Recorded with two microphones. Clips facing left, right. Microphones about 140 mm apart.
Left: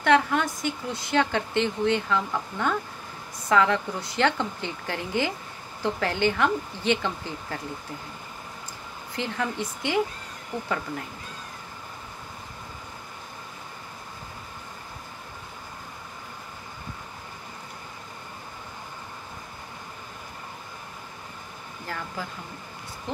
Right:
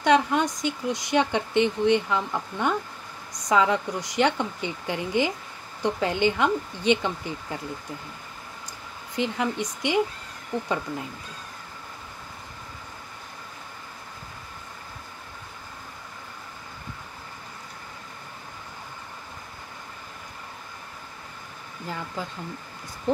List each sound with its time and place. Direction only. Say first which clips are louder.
0.0 s speech: right 1 dB; 20° right (ahead or behind)
9.1 s speech: right 3 dB; 15° right (ahead or behind)
21.8 s speech: right 2 dB; 20° right (ahead or behind)